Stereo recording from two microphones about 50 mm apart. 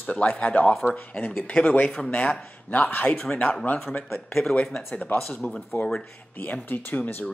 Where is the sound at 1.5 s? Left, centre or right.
Left.